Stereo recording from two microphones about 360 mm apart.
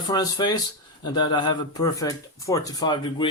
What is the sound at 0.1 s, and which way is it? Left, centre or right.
Speech, centre.